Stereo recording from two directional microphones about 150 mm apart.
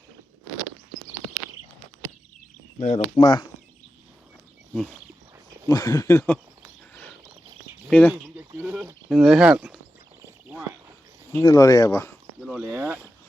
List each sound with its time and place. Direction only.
2.7 s speech: 50° left (ahead or behind)
3.2 s speech: 25° left (ahead or behind)
5.6 s speech: 20° left (ahead or behind)
7.9 s speech: 10° left (ahead or behind)
8.1 s a sound: 10° right (ahead or behind)
9.0 s speech: 5° right (ahead or behind)
11.4 s speech: 25° left (ahead or behind)
12.4 s a sound: centre (ahead or behind)
12.6 s speech: 10° right (ahead or behind)